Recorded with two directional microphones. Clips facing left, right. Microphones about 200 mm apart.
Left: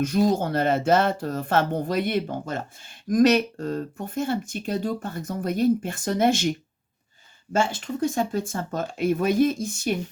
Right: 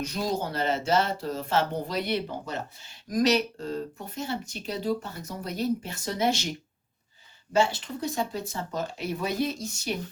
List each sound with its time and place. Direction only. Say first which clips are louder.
0.0 s speech: left 8 dB; 50° left (ahead or behind)
7.5 s speech: left 1 dB; 50° left (ahead or behind)